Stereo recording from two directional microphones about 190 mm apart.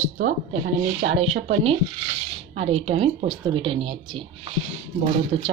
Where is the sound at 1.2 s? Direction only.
30° right (ahead or behind).